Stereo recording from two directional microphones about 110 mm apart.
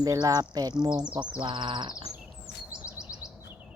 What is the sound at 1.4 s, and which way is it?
Speech, 45° right (ahead or behind).